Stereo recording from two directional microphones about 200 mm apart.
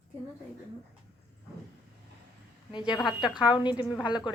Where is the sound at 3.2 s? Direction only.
20° left (ahead or behind).